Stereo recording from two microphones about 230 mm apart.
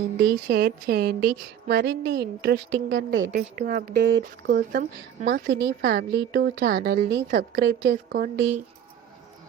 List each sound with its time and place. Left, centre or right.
0.2 s a woman's voice: right
3.3 s a woman's voice: right